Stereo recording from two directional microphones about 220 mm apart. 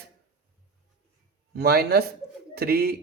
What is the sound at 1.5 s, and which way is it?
Speech, 45° right (ahead or behind).